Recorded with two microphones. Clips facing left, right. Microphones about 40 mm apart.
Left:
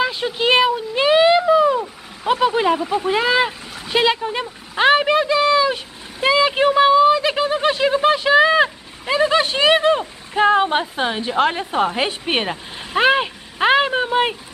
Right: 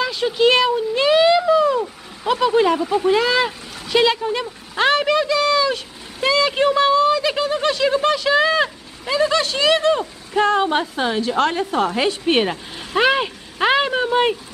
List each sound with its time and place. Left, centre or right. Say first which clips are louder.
0.0 s speech: right 2 dB; centre
1.0 s a sound: left 1 dB; left
1.8 s speech: right 2 dB; centre